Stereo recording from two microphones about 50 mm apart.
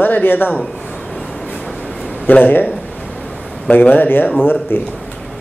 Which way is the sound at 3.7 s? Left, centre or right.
Left.